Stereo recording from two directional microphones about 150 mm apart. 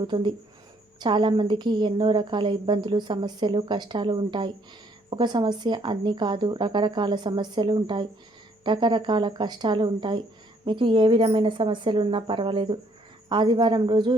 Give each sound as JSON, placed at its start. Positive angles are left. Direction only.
{"t": 0.0, "sound": "a woman's voice", "side_deg": -30}